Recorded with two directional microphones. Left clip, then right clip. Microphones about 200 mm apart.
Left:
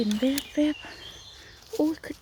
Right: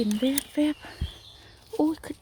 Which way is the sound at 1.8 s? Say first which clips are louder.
Right 1 dB; 10° right (ahead or behind).